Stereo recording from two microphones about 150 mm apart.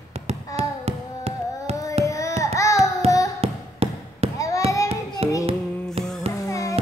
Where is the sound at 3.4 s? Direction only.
40° right (ahead or behind).